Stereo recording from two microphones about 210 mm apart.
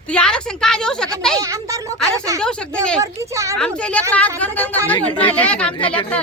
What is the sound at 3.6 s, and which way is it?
A woman's voice, 5° left (ahead or behind).